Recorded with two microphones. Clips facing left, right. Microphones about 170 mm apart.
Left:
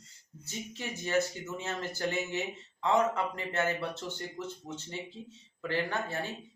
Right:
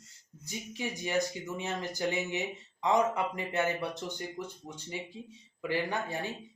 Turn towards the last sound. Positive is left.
turn(degrees=-15)  # may be behind; listen again after turning